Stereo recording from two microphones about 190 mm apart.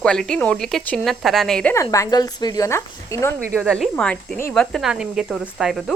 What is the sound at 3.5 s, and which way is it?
A woman's voice, centre (ahead or behind).